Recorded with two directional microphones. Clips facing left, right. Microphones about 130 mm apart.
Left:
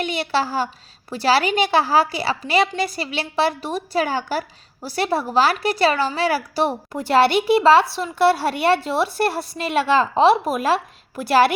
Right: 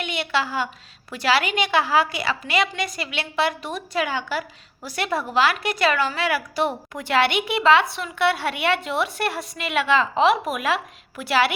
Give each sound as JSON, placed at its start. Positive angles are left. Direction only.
{"t": 0.0, "sound": "a woman's voice", "side_deg": 35}